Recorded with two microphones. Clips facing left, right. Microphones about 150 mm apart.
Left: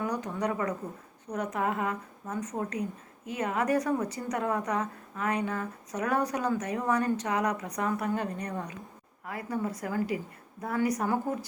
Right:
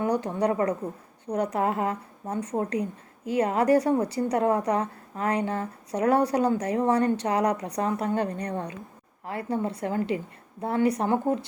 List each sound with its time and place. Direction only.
0.0 s a woman's voice: 30° right (ahead or behind)